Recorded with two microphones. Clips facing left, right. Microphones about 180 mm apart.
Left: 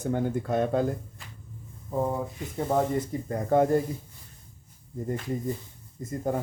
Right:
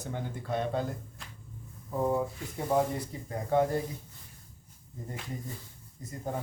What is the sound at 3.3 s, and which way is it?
Speech, 50° left (ahead or behind).